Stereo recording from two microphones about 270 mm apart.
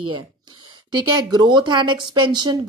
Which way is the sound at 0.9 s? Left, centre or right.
Centre.